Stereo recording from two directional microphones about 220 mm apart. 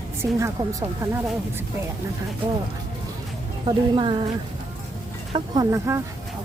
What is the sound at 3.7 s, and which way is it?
Speech, 20° right (ahead or behind).